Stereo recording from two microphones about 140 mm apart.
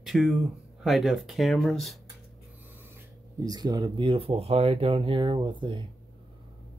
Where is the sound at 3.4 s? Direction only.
30° right (ahead or behind).